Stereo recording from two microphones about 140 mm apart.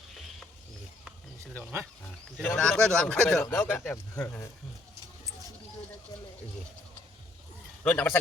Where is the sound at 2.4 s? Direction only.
5° left (ahead or behind).